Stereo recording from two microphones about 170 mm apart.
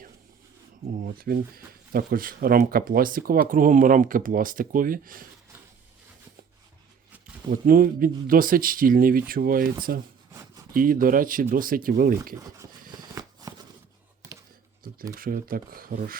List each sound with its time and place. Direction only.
0.9 s speech: 60° right (ahead or behind)
7.5 s speech: 55° right (ahead or behind)
10.8 s speech: 55° right (ahead or behind)
12.4 s speech: 20° right (ahead or behind)
13.0 s a sound: 20° right (ahead or behind)
15.1 s speech: 55° right (ahead or behind)